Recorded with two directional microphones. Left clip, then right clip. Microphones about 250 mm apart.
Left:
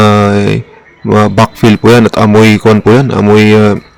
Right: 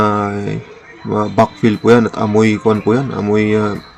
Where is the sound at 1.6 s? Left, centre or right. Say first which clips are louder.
Left 8 dB; left.